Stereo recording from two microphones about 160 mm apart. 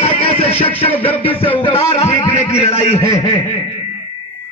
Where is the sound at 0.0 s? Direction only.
35° left (ahead or behind).